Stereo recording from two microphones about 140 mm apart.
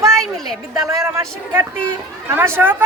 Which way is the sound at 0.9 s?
20° right (ahead or behind).